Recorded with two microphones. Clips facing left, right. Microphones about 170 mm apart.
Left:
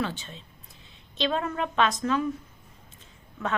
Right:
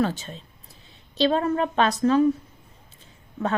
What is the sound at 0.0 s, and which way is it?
Speech, 40° right (ahead or behind).